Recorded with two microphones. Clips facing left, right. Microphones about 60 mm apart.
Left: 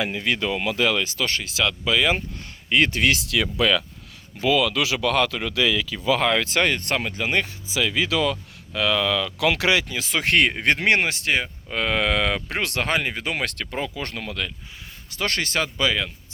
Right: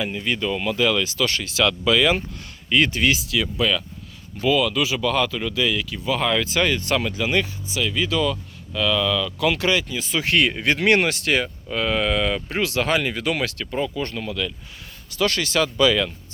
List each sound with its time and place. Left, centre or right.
0.0 s speech: left
0.9 s speech: left
2.6 s speech: left
3.2 s speech: left
6.1 s speech: left
7.9 s speech: left
10.8 s speech: left
11.7 s speech: left
13.4 s speech: left
15.1 s speech: left